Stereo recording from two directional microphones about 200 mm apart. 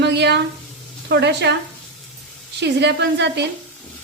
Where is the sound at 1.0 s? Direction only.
60° right (ahead or behind).